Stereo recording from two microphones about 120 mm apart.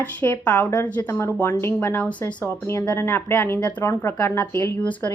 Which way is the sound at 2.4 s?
25° left (ahead or behind).